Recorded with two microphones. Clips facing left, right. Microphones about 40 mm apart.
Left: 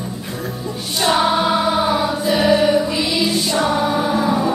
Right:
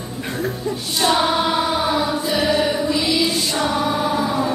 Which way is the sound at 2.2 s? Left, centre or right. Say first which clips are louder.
Left 3 dB; centre.